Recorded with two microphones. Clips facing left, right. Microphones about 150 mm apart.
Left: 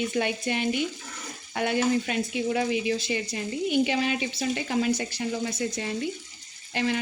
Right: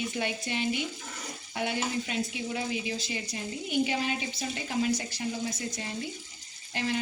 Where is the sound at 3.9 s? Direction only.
90° left.